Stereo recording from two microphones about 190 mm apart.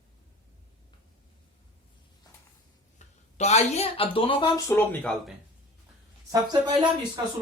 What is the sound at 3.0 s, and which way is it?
Speech, 35° left (ahead or behind).